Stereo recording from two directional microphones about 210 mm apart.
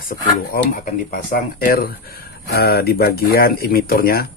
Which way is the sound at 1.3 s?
40° left (ahead or behind).